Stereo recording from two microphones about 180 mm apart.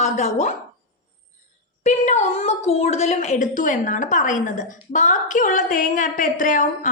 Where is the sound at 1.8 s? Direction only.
40° left (ahead or behind).